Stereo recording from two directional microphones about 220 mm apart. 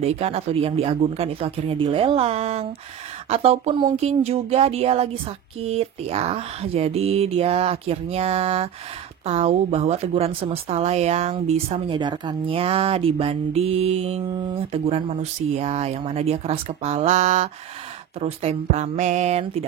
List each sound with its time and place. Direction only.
0.0 s speech: 30° right (ahead or behind)